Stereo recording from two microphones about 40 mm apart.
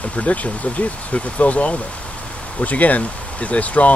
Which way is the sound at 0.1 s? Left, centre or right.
Left.